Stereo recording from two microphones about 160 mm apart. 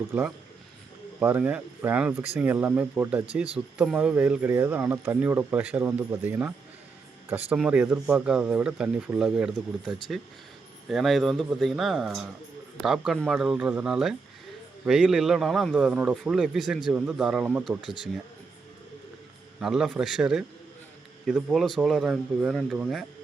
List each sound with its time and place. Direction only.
0.1 s a man's voice: 5° right (ahead or behind)
7.5 s a man's voice: 5° right (ahead or behind)
17.8 s speech: 30° left (ahead or behind)
19.5 s a man's voice: 5° right (ahead or behind)